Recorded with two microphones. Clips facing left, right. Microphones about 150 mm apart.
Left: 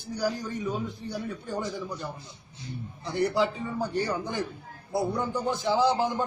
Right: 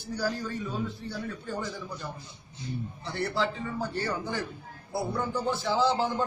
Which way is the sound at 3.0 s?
15° left (ahead or behind).